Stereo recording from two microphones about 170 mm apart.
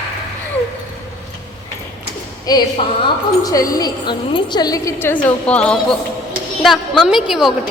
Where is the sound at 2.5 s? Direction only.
20° left (ahead or behind); by 7.5 s centre (ahead or behind).